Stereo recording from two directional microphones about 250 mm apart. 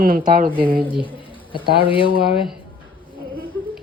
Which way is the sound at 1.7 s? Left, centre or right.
Left.